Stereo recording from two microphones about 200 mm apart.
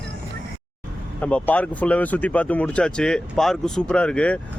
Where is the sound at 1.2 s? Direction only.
5° left (ahead or behind).